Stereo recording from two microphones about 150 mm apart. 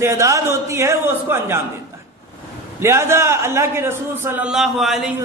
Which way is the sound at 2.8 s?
20° right (ahead or behind).